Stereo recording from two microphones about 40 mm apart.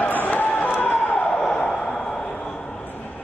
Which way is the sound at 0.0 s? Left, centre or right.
Left.